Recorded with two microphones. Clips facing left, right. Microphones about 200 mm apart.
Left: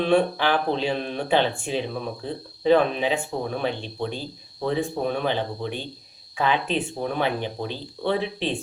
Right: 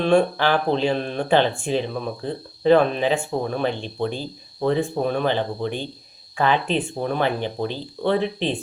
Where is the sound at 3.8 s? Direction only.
45° right (ahead or behind).